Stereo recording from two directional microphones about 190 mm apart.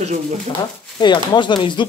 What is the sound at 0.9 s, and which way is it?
Speech, 25° left (ahead or behind).